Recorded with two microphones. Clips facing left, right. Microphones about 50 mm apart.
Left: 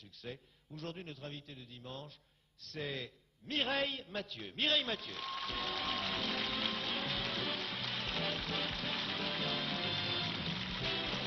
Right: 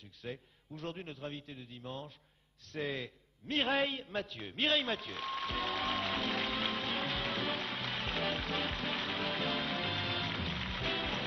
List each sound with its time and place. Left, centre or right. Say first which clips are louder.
0.2 s a man's voice: right 3 dB; centre
5.3 s music: right 4 dB; centre
6.4 s music: right 3 dB; centre
9.7 s music: right 2 dB; centre